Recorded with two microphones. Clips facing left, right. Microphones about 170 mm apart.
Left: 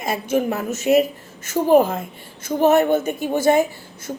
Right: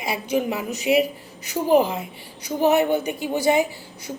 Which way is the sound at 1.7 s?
45° left (ahead or behind).